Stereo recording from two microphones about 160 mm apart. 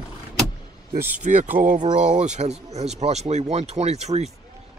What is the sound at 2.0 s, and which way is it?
Speech, 45° right (ahead or behind).